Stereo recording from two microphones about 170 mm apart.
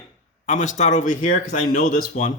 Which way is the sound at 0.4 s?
45° left (ahead or behind).